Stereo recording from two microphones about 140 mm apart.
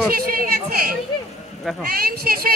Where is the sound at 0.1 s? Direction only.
90° right.